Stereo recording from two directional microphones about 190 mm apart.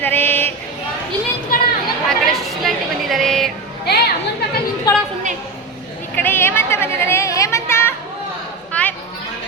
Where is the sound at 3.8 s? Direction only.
60° left (ahead or behind).